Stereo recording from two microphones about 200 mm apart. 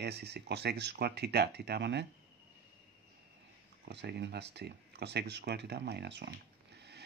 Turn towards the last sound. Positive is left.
turn(degrees=-60)  # may be behind; listen again after turning